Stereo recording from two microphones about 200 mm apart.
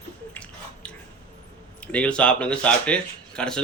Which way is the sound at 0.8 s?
5° left (ahead or behind).